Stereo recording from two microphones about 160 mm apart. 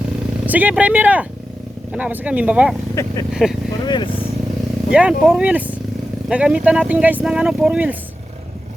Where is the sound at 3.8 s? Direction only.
30° left (ahead or behind).